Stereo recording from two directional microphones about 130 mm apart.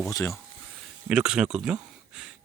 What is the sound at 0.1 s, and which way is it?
Speech, 25° left (ahead or behind).